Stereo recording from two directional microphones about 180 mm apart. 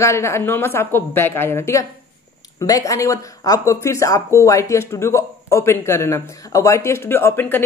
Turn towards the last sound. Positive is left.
turn(degrees=10)  # may be behind; listen again after turning